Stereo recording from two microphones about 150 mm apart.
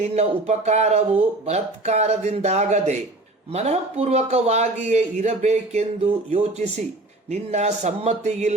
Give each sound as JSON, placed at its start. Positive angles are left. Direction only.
{"t": 0.0, "sound": "a man's voice", "side_deg": -45}